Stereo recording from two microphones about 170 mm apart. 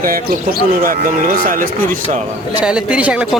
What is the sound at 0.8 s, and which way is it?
Speech, 55° right (ahead or behind).